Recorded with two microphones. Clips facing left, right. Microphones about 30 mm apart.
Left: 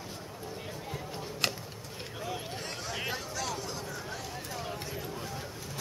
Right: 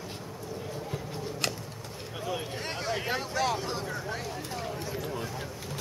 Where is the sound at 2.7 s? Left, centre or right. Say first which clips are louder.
Right 5 dB; right.